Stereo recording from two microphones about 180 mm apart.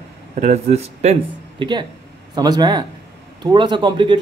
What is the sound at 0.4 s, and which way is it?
Speech, 35° right (ahead or behind).